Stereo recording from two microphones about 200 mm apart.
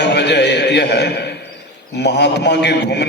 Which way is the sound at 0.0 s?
60° left (ahead or behind).